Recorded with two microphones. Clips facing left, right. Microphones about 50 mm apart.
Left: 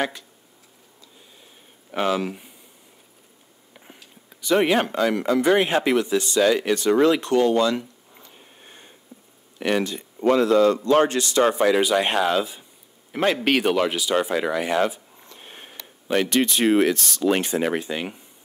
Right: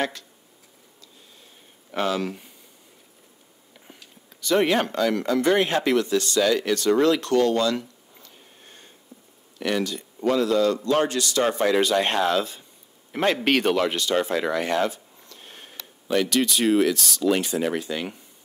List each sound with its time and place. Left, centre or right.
1.9 s speech: centre
4.3 s speech: centre
11.6 s speech: centre
14.9 s speech: centre